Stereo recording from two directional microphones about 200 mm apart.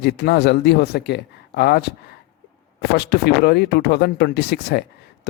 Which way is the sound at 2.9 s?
55° left (ahead or behind).